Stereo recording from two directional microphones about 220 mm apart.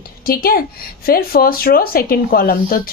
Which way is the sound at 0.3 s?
40° left (ahead or behind).